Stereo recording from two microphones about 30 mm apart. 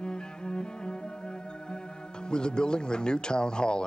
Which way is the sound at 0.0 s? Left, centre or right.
Left.